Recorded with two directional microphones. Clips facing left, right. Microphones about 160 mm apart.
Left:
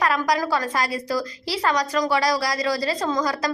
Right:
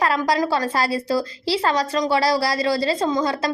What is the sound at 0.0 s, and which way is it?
A woman's voice, 30° right (ahead or behind).